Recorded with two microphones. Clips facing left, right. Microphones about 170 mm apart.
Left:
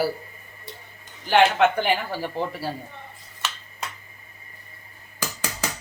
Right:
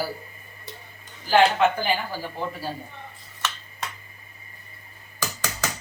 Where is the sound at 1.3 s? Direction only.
70° left (ahead or behind).